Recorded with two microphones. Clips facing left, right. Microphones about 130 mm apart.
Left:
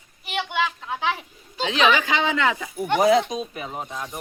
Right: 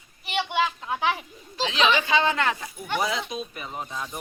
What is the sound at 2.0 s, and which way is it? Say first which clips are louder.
Speech: left 1 dB; 90° left.